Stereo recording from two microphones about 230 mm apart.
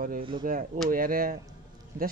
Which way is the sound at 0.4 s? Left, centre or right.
Right.